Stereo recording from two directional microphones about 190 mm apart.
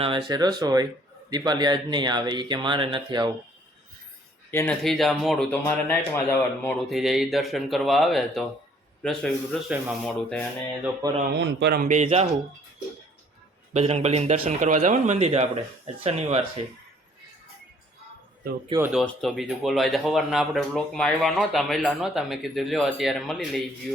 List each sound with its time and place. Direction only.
0.0 s speech: 25° right (ahead or behind)
4.5 s speech: 5° left (ahead or behind)
5.5 s speech: 10° left (ahead or behind)
6.8 s speech: centre (ahead or behind)
11.0 s speech: 20° right (ahead or behind)
11.3 s a man's voice: 65° right (ahead or behind)
11.8 s a man's voice: 40° right (ahead or behind)
13.7 s a man's voice: 35° right (ahead or behind)
18.7 s speech: 25° right (ahead or behind)
19.0 s speech: centre (ahead or behind)